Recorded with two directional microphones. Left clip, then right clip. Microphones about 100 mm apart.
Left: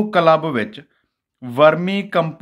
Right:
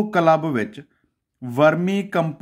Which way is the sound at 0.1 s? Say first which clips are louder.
Left 3 dB; 35° right (ahead or behind).